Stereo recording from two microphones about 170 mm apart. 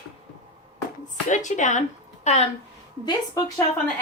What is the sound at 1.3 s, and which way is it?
A woman's voice, 45° left (ahead or behind).